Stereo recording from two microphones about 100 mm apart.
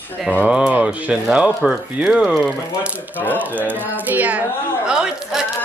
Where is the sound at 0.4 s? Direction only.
10° right (ahead or behind).